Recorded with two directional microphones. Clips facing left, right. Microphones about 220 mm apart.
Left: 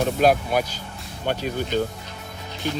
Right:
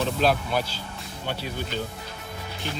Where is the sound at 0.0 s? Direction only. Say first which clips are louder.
Left 4 dB; 50° left (ahead or behind).